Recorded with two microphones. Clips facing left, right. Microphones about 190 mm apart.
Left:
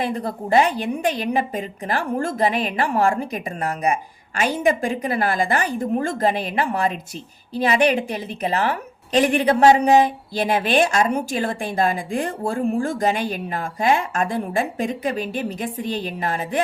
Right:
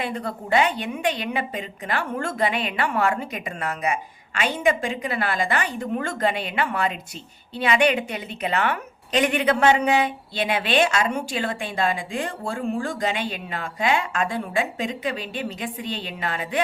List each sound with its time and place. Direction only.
0.0 s a woman's voice: 35° left (ahead or behind)
13.1 s a woman's voice: 40° left (ahead or behind)